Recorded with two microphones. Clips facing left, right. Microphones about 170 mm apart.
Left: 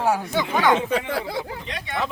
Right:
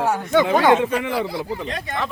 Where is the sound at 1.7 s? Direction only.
45° right (ahead or behind).